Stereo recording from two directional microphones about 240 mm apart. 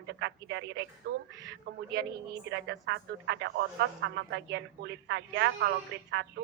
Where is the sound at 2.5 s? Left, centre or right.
Right.